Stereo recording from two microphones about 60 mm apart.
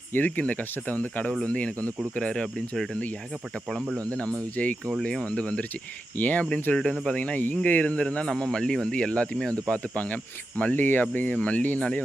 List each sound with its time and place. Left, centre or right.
0.3 s speech: left
3.9 s speech: centre
6.1 s speech: left
6.4 s speech: centre